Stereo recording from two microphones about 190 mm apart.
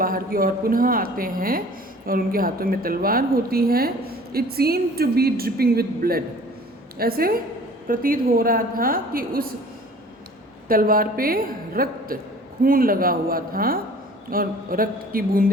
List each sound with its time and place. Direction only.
0.0 s a woman's voice: 50° right (ahead or behind)
10.7 s a woman's voice: 50° right (ahead or behind)